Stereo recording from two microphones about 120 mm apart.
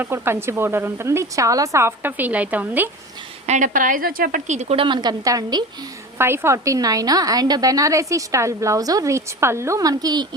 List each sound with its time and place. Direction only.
0.0 s a woman's voice: 20° right (ahead or behind)
3.4 s speech: 80° right
4.4 s speech: 75° right (ahead or behind)
4.8 s a woman's voice: 40° right (ahead or behind)
6.1 s a woman's voice: 20° right (ahead or behind)